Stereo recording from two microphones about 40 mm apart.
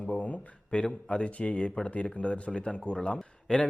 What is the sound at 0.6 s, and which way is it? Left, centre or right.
Speech, left.